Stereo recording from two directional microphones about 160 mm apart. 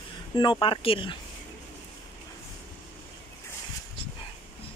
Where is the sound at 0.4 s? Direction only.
30° left (ahead or behind).